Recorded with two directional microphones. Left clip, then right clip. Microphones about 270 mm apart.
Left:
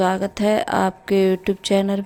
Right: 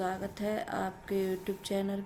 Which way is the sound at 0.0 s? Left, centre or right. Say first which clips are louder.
Left 15 dB; left.